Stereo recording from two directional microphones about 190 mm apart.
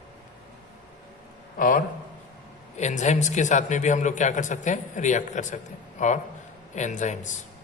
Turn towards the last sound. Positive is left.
turn(degrees=40)  # may be behind; listen again after turning